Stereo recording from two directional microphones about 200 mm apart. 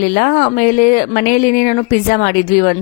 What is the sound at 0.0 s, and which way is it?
Speech, 45° left (ahead or behind).